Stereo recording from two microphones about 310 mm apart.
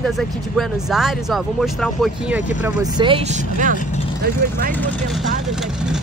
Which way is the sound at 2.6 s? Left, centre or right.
Centre.